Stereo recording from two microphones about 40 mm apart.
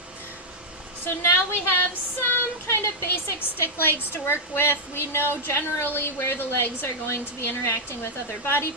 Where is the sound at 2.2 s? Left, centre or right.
Left.